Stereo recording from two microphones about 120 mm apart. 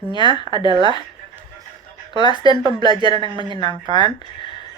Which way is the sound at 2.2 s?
40° left (ahead or behind).